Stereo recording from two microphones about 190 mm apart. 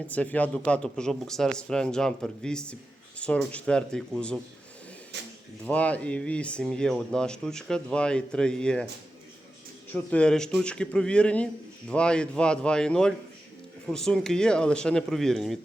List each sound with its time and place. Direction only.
0.1 s speech: 10° left (ahead or behind)
5.1 s speech: 65° right (ahead or behind)
5.6 s speech: 5° left (ahead or behind)
9.9 s speech: 5° left (ahead or behind)